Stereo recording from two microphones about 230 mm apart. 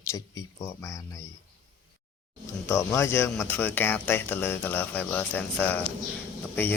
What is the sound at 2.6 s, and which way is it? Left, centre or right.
Speech, centre.